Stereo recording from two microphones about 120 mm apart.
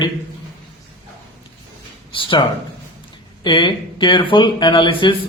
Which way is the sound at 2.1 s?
45° left (ahead or behind).